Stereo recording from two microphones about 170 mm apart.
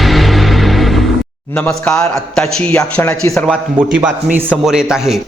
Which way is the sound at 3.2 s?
20° left (ahead or behind).